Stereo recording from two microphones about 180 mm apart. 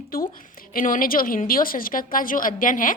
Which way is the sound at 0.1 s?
55° left (ahead or behind).